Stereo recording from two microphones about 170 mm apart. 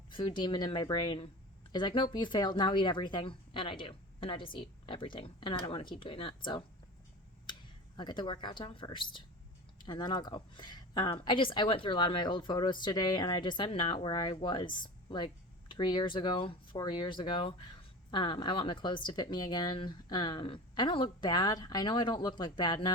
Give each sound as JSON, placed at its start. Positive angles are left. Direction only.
{"t": 0.1, "sound": "speech", "side_deg": 30}
{"t": 7.9, "sound": "speech", "side_deg": 25}